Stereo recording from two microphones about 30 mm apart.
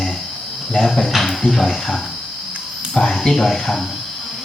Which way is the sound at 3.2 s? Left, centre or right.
Centre.